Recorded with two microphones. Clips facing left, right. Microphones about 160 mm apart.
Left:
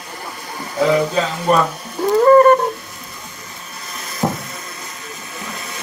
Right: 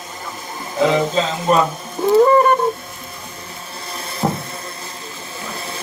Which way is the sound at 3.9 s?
30° right (ahead or behind).